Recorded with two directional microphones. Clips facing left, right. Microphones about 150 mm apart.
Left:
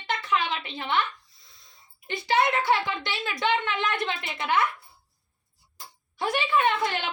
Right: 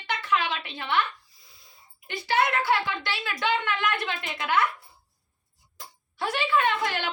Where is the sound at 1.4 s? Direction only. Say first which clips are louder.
Right 1 dB; 5° right (ahead or behind).